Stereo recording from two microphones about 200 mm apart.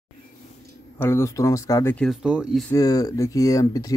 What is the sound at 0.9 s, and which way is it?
Speech, 10° left (ahead or behind).